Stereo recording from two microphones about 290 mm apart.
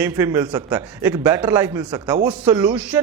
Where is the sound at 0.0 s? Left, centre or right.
Centre.